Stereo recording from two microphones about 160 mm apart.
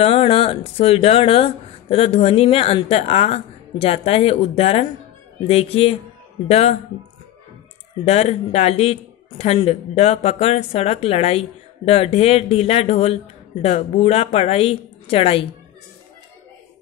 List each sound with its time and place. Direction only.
0.0 s speech: 35° left (ahead or behind)
8.0 s speech: 40° left (ahead or behind)